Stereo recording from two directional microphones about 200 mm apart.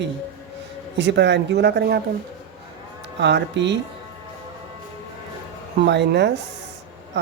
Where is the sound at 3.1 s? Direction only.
60° right (ahead or behind).